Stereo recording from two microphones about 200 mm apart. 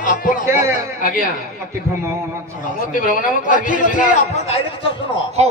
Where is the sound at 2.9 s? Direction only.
40° left (ahead or behind).